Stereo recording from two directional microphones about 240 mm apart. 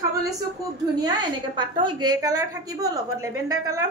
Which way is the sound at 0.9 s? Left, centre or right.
Centre.